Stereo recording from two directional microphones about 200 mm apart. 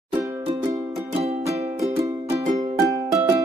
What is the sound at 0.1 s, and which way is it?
Music, 15° right (ahead or behind).